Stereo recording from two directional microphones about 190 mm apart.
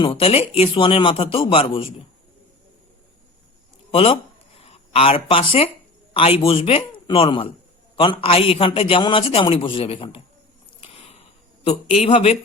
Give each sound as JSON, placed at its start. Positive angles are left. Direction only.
{"t": 0.0, "sound": "a man's voice", "side_deg": 30}
{"t": 3.9, "sound": "a man's voice", "side_deg": 30}
{"t": 10.8, "sound": "a sound", "side_deg": 30}